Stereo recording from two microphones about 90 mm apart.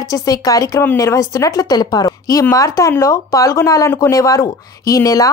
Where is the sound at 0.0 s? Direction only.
40° left (ahead or behind).